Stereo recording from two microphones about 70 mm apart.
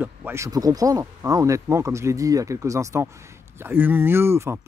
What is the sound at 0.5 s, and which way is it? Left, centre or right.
A man's voice, right.